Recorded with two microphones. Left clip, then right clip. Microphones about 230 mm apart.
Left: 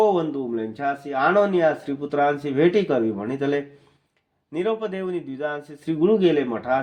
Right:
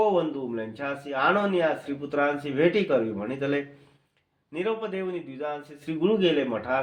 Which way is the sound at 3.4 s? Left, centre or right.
Left.